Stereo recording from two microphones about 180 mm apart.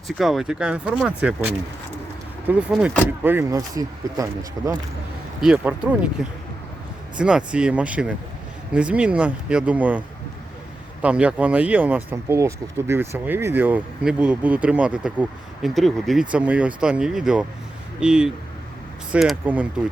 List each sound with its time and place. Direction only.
0.2 s speech: centre (ahead or behind); by 4.8 s 20° right (ahead or behind)
5.4 s speech: 5° right (ahead or behind)
7.2 s speech: 5° right (ahead or behind)
11.0 s speech: 5° right (ahead or behind)